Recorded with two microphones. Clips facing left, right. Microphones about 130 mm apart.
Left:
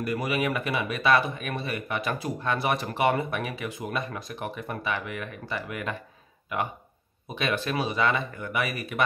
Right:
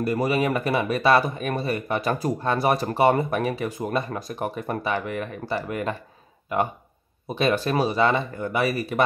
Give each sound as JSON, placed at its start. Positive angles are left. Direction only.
{"t": 0.0, "sound": "speech", "side_deg": -35}